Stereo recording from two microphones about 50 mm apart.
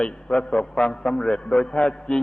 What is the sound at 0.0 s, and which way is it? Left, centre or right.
A man's voice, centre.